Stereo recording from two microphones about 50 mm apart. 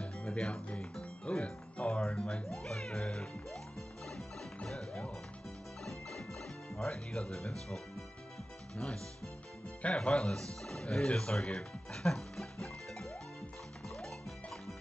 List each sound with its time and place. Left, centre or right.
0.0 s music: left
1.2 s speech: left
4.6 s music: centre
6.8 s speech: centre
8.7 s speech: centre
13.8 s music: centre